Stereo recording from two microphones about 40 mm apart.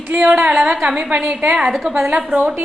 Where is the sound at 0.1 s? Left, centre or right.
Right.